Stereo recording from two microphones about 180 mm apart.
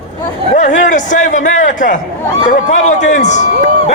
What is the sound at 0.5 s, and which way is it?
A man's voice, 45° left (ahead or behind).